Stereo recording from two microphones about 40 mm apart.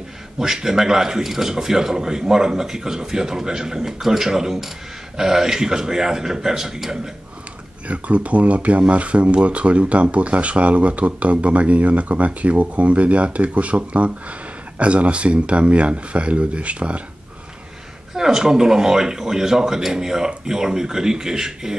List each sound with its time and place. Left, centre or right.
0.4 s a man's voice: centre
7.9 s speech: right
18.1 s a man's voice: centre